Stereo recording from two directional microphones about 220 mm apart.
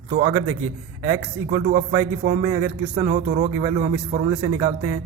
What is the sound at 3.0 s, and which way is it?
A man's voice, 40° right (ahead or behind).